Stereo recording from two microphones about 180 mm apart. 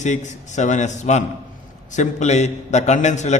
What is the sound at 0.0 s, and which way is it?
A man's voice, 40° left (ahead or behind).